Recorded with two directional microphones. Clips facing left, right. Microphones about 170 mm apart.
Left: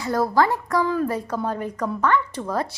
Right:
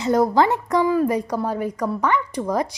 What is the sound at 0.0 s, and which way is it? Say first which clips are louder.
A woman's voice: right 3 dB; 20° right (ahead or behind).